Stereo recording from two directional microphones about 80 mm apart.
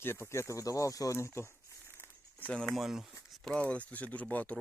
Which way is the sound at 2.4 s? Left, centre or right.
Centre.